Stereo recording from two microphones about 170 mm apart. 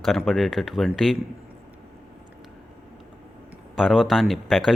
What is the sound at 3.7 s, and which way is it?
Speech, centre (ahead or behind).